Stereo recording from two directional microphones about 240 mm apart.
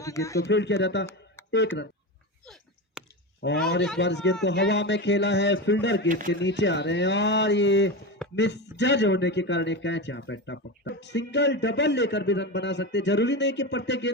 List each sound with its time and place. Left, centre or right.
0.0 s speech: centre
0.3 s a man's voice: left
3.0 s a sound: centre
3.4 s a man's voice: left